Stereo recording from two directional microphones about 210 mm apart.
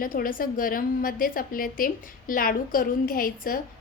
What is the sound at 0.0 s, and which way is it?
A woman's voice, 40° left (ahead or behind).